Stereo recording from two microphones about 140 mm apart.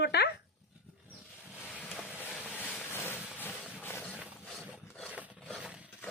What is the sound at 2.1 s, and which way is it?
Vehicle, 10° right (ahead or behind).